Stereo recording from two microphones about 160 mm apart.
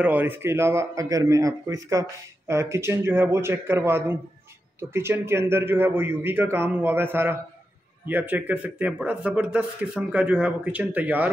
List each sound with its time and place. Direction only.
0.0 s speech: 10° right (ahead or behind)